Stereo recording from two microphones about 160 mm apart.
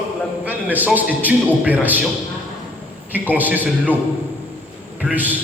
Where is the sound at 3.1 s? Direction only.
10° right (ahead or behind).